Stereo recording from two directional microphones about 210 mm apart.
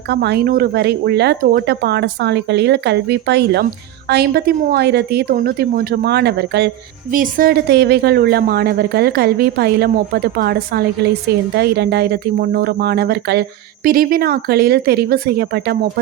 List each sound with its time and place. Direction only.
0.1 s a woman's voice: 50° right (ahead or behind)
7.1 s a woman's voice: 40° right (ahead or behind)